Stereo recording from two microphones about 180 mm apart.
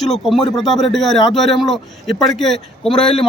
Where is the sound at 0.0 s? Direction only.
Centre (ahead or behind).